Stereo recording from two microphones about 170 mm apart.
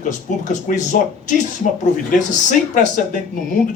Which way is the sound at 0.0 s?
45° left (ahead or behind).